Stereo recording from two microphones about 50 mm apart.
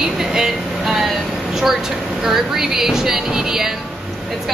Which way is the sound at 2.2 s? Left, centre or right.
Centre.